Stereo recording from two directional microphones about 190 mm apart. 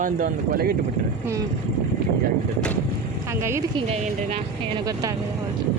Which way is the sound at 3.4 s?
15° right (ahead or behind).